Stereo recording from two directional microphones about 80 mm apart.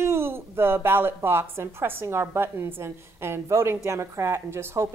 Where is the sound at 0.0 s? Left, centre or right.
Right.